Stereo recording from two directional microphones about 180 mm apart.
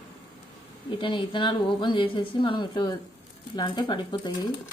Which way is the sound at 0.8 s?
25° left (ahead or behind).